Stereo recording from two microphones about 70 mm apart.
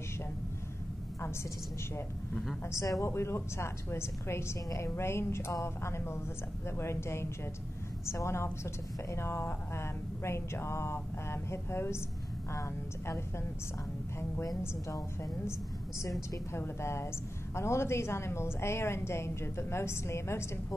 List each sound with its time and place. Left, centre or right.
2.8 s a woman's voice: left
3.1 s speech: left
12.5 s a woman's voice: left
16.0 s speech: left